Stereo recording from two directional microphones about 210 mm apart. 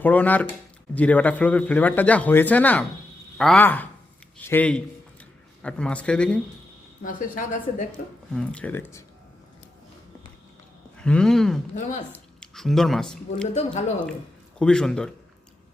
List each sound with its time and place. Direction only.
0.0 s speech: 10° left (ahead or behind)
7.0 s a woman's voice: 40° left (ahead or behind)
8.3 s speech: 5° left (ahead or behind)
10.9 s speech: 5° left (ahead or behind)
11.7 s a woman's voice: 35° left (ahead or behind)
12.1 s speech: 5° left (ahead or behind)
14.6 s speech: 5° left (ahead or behind)